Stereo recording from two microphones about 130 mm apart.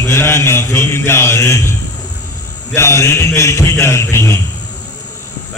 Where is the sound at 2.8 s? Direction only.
20° left (ahead or behind).